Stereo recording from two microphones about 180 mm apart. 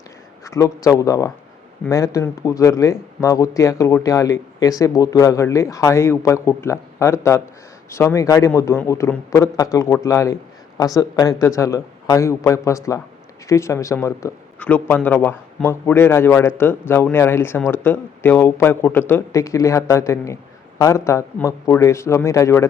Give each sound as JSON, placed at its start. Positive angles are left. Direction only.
{"t": 0.4, "sound": "speech", "side_deg": 15}